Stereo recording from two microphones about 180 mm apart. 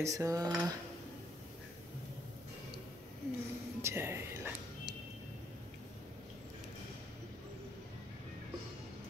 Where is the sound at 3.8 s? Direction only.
15° right (ahead or behind).